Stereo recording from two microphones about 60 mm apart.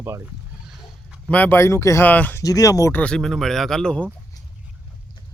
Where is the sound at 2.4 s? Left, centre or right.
Left.